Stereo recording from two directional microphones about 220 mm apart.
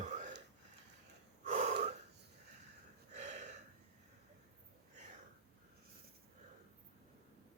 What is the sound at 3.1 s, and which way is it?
Gasp, 30° right (ahead or behind).